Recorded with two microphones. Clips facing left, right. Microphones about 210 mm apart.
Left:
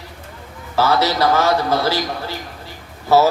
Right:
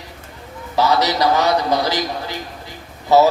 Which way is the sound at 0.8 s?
15° right (ahead or behind).